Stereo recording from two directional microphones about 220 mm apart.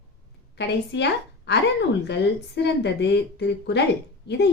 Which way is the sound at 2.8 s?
50° left (ahead or behind).